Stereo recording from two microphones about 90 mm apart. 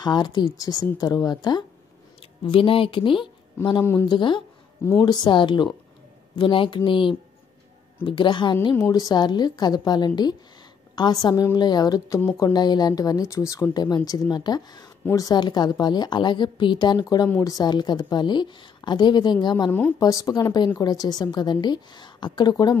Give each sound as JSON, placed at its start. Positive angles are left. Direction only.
{"t": 0.0, "sound": "a woman's voice", "side_deg": 50}
{"t": 2.4, "sound": "speech", "side_deg": 75}
{"t": 3.8, "sound": "speech", "side_deg": 30}
{"t": 4.1, "sound": "speech", "side_deg": 65}
{"t": 8.8, "sound": "a woman's voice", "side_deg": 45}
{"t": 20.0, "sound": "a woman's voice", "side_deg": 40}